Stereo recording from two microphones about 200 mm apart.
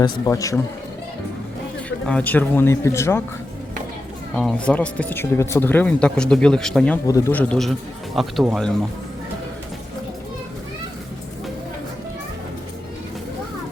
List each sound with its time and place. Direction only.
0.0 s speech: 15° left (ahead or behind)
2.0 s speech: 5° left (ahead or behind)
4.4 s speech: 5° left (ahead or behind)